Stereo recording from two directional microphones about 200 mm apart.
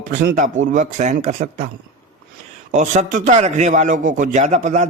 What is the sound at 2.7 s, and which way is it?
Speech, 35° right (ahead or behind).